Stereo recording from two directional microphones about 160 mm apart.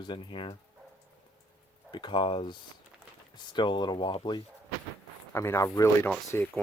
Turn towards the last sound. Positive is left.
turn(degrees=15)  # may be behind; listen again after turning